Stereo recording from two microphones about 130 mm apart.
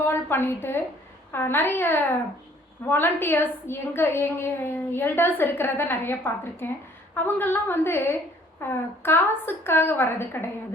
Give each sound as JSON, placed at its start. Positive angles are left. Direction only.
{"t": 0.0, "sound": "a woman's voice", "side_deg": 15}